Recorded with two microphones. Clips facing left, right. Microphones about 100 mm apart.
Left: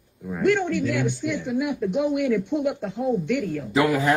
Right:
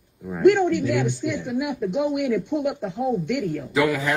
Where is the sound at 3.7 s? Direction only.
35° left (ahead or behind).